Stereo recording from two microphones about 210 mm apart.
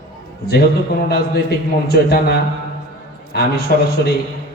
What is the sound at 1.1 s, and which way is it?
A man's voice, 50° left (ahead or behind).